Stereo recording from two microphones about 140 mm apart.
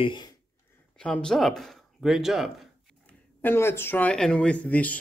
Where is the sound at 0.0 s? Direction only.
35° left (ahead or behind).